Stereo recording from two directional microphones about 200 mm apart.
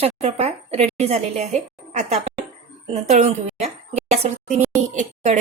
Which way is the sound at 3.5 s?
35° right (ahead or behind).